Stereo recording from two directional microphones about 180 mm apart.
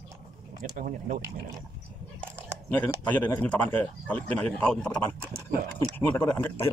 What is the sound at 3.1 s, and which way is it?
A man's voice, 10° left (ahead or behind).